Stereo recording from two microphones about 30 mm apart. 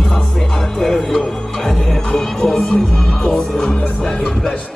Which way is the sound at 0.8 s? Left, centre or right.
Centre.